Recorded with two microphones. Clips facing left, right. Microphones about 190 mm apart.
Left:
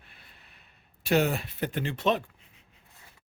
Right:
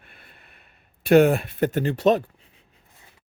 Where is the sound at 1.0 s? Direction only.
55° right (ahead or behind); by 2.2 s 40° right (ahead or behind).